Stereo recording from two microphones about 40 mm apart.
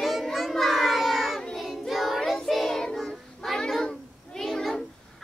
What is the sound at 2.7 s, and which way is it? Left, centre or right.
Music, centre.